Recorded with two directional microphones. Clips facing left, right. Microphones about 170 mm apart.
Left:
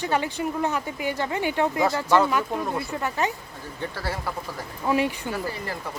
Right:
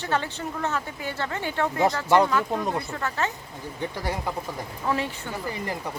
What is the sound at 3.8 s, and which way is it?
Speech, 15° right (ahead or behind).